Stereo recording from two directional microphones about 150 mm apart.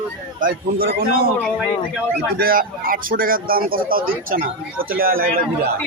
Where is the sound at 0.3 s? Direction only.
75° right (ahead or behind).